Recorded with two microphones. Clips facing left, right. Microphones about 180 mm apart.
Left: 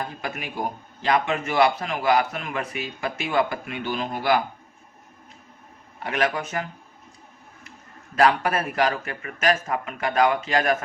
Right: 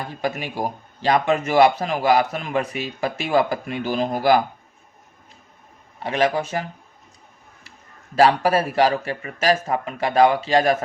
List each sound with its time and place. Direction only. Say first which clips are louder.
0.2 s a man's voice: right 5 dB; 35° right (ahead or behind)
6.0 s speech: right 4 dB; 25° right (ahead or behind)
8.1 s a man's voice: right 4 dB; 35° right (ahead or behind)